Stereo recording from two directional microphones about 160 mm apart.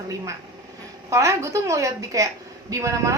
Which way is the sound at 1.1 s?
20° right (ahead or behind).